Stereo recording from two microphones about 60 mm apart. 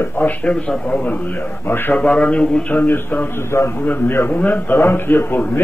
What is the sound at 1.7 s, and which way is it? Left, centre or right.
Speech, left.